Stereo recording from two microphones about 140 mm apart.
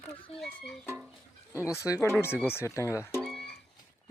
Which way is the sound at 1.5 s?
20° left (ahead or behind).